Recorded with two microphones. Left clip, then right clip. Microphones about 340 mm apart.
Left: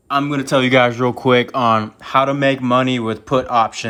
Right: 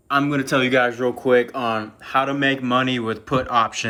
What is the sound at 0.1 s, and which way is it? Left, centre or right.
Speech, centre.